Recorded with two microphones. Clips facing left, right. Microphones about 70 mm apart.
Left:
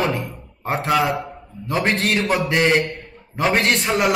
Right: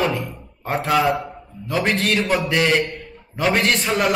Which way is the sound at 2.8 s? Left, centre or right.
Centre.